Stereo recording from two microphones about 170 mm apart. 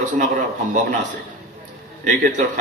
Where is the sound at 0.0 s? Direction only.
45° right (ahead or behind).